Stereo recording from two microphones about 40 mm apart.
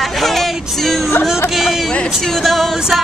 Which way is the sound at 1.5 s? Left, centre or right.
Centre.